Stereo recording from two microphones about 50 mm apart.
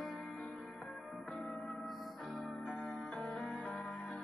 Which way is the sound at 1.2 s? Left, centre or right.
Left.